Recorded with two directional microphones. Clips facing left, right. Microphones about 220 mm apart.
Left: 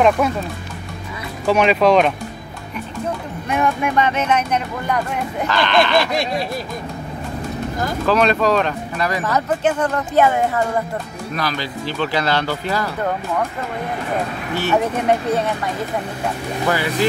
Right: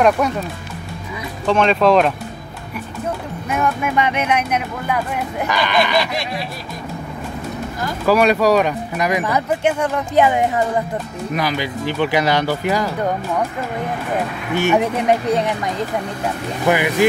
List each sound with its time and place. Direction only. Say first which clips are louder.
0.2 s speech: even; centre (ahead or behind)
1.5 s speech: even; 5° left (ahead or behind)
3.4 s speech: left 1 dB; centre (ahead or behind)
8.1 s speech: right 3 dB; 10° right (ahead or behind)
14.6 s speech: right 2 dB; 15° right (ahead or behind)